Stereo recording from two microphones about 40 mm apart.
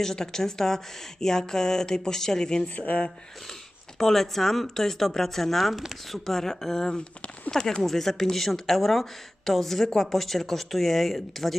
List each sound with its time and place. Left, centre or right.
0.0 s speech: centre
2.7 s speech: left
3.9 s speech: centre